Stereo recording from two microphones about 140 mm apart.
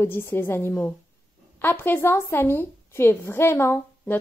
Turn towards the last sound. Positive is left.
turn(degrees=15)  # may be behind; listen again after turning